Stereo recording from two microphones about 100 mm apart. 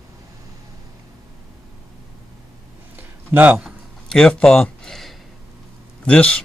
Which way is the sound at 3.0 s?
20° right (ahead or behind).